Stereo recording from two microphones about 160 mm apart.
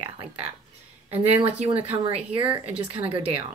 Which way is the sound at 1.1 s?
35° right (ahead or behind).